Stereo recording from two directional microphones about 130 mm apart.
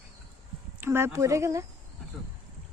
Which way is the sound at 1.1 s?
25° right (ahead or behind).